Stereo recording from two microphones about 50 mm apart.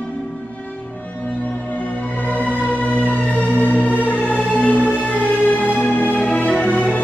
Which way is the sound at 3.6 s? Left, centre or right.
Left.